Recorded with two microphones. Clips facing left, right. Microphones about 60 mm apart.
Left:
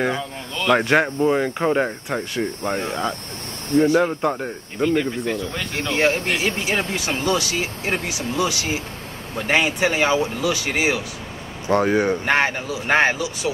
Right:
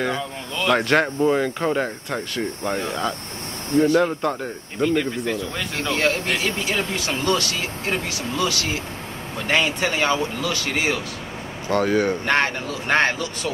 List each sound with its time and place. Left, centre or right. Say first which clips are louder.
0.6 s speech: left 1 dB; centre
5.9 s speech: left 3 dB; left